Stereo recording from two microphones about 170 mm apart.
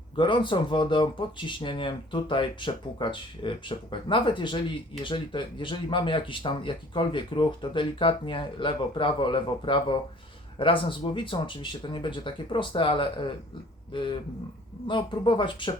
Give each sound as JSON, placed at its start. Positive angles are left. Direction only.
{"t": 0.2, "sound": "speech", "side_deg": 30}